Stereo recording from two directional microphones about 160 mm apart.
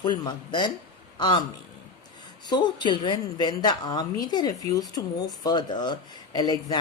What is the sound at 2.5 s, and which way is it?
A woman's voice, 25° left (ahead or behind).